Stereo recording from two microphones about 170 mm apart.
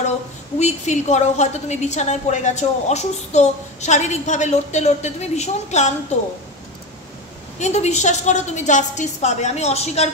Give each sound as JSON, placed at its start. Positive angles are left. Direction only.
{"t": 0.6, "sound": "a woman's voice", "side_deg": 40}
{"t": 7.5, "sound": "a woman's voice", "side_deg": 40}